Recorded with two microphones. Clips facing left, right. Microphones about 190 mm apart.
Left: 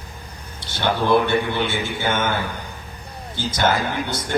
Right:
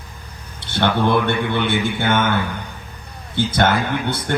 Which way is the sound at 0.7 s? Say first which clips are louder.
Right 1 dB; 55° right (ahead or behind).